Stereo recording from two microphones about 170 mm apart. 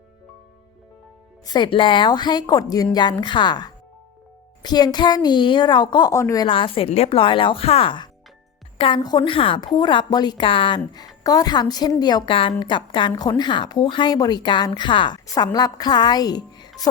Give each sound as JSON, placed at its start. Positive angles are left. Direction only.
{"t": 1.5, "sound": "a woman's voice", "side_deg": 30}